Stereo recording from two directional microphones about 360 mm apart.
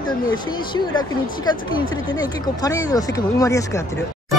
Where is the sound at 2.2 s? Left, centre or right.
Centre.